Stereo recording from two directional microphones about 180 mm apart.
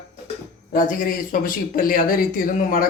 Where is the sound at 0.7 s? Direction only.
50° left (ahead or behind).